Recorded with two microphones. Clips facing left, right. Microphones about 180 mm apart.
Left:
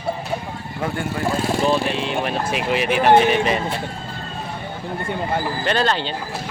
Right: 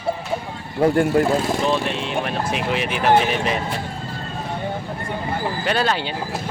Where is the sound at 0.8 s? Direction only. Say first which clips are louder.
Right 9 dB; 35° right (ahead or behind).